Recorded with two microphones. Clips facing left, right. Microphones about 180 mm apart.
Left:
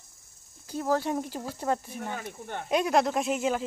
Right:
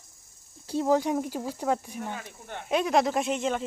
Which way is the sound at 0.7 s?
25° right (ahead or behind).